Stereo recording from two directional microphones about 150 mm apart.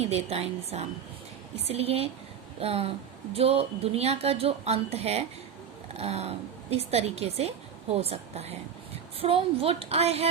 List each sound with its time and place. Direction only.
0.1 s a woman's voice: 45° right (ahead or behind)